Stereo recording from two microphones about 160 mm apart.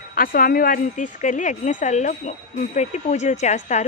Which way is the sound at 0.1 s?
65° left (ahead or behind).